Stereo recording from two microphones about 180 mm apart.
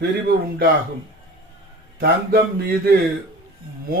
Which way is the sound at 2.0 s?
55° right (ahead or behind).